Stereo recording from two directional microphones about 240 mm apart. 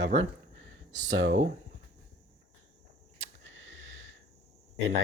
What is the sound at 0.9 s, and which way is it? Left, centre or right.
Speech, right.